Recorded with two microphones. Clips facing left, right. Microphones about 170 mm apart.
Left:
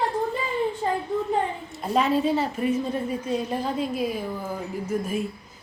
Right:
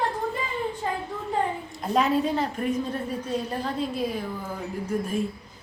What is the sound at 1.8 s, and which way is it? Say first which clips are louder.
A woman's voice: left 1 dB; centre (ahead or behind).